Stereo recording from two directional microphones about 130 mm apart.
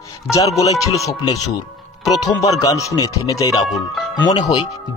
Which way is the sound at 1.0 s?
25° left (ahead or behind).